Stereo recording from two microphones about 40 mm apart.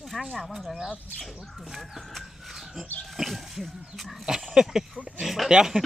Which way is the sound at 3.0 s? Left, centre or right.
Centre.